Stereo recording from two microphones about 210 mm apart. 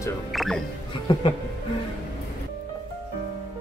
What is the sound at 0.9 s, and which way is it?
Speech, 25° left (ahead or behind).